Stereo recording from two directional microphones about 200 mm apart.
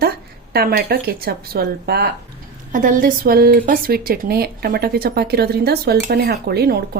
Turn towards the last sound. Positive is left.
turn(degrees=-50)  # may be behind; listen again after turning